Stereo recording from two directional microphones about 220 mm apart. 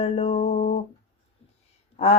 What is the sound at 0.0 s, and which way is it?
Music, 30° left (ahead or behind).